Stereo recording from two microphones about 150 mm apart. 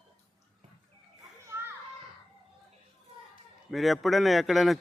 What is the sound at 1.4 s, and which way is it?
Children playing, 15° right (ahead or behind).